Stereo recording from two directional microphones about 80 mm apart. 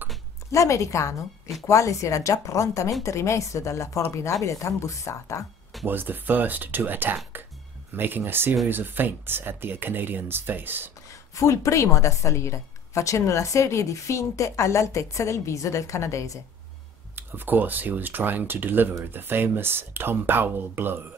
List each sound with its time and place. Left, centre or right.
0.5 s a woman's voice: left
5.9 s speech: right
11.3 s a woman's voice: left
17.1 s speech: right